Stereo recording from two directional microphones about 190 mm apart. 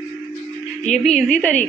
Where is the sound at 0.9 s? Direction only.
5° left (ahead or behind).